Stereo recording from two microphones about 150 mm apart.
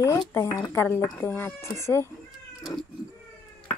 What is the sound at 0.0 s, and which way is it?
Speech, 20° left (ahead or behind).